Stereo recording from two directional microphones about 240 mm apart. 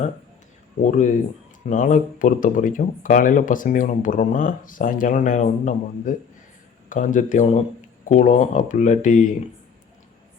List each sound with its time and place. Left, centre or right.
0.8 s speech: left